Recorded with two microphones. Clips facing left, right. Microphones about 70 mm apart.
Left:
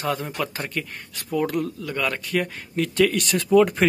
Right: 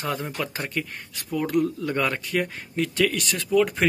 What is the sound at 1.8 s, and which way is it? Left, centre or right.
Speech, right.